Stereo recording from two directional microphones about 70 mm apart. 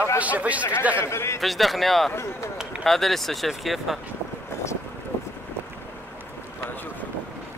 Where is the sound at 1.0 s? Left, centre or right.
Left.